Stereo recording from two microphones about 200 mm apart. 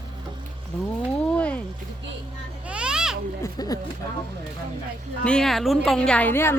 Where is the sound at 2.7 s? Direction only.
5° right (ahead or behind).